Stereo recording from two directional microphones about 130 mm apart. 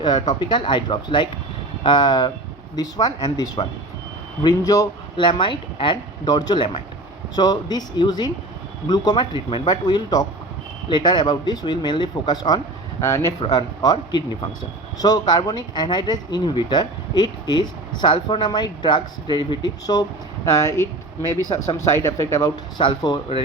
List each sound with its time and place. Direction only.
0.0 s speech: 35° left (ahead or behind)
13.4 s speech: 35° left (ahead or behind)
22.8 s speech: 35° left (ahead or behind)